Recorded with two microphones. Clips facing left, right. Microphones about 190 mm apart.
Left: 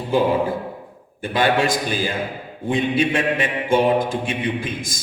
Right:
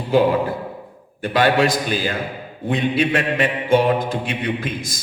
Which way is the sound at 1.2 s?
60° right (ahead or behind).